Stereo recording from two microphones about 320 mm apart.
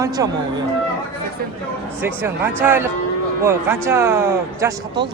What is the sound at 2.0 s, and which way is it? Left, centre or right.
Speech, centre.